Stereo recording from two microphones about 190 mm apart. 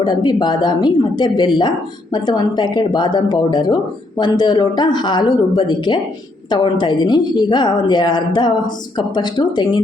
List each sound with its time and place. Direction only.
0.0 s a woman's voice: 25° left (ahead or behind)